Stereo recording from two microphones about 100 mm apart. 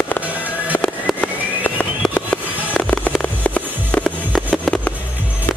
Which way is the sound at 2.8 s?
5° left (ahead or behind).